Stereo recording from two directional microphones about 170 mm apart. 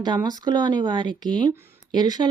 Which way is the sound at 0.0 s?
25° right (ahead or behind).